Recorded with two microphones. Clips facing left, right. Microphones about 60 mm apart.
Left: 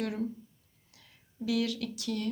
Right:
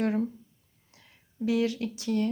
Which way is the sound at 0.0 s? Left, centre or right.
Right.